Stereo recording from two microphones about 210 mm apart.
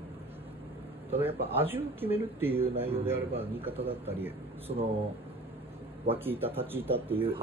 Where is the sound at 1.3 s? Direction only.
25° right (ahead or behind).